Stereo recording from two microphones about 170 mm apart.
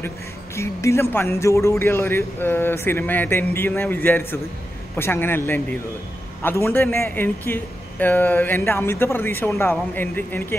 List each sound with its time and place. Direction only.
0.6 s speech: 15° left (ahead or behind)
6.4 s speech: 15° left (ahead or behind)